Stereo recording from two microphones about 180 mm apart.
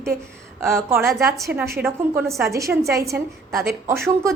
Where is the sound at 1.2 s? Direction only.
15° right (ahead or behind).